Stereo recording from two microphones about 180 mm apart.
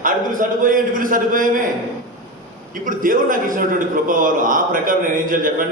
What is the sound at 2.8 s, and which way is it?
A man's voice, 50° right (ahead or behind).